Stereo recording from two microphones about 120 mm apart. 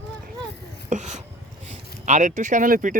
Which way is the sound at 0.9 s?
75° right (ahead or behind).